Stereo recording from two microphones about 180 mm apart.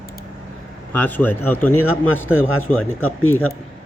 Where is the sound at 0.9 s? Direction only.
10° left (ahead or behind).